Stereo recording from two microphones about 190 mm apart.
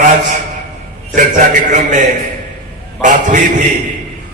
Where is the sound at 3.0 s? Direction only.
40° right (ahead or behind).